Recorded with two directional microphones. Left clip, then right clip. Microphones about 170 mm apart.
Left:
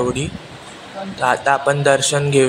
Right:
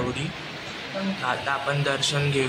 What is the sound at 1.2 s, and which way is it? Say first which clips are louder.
Speech: left 12 dB; 45° left (ahead or behind).